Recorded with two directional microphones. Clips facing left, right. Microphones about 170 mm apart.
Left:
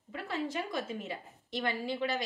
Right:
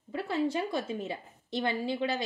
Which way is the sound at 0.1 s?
30° right (ahead or behind).